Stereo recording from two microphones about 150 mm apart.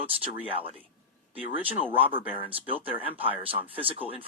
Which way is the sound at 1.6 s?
10° right (ahead or behind).